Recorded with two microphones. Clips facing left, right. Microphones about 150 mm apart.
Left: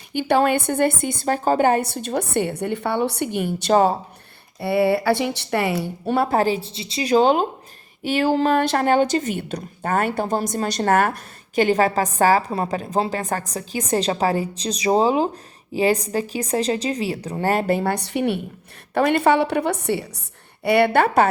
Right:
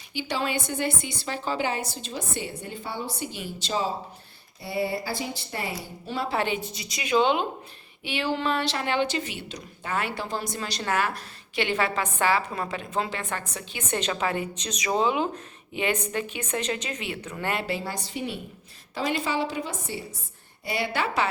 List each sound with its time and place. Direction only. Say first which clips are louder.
0.1 s a woman's voice: left 10 dB; 55° left (ahead or behind)
6.4 s a woman's voice: left 7 dB; 35° left (ahead or behind); by 21.2 s 55° left (ahead or behind)